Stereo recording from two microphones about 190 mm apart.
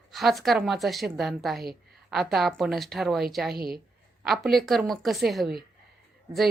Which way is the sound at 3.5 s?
55° right (ahead or behind).